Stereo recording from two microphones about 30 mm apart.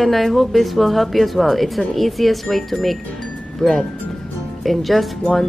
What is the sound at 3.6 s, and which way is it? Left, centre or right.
Speech, left.